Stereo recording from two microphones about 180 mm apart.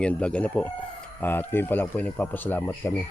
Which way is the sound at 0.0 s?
5° left (ahead or behind).